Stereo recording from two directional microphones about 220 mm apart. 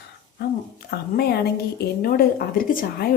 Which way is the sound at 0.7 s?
45° left (ahead or behind).